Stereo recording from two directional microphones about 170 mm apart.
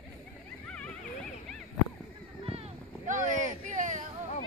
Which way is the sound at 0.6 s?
5° left (ahead or behind).